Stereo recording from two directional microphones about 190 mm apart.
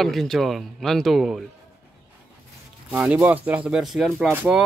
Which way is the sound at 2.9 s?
10° right (ahead or behind).